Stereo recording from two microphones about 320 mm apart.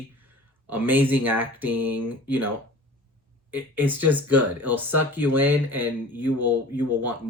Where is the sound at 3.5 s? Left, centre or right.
Centre.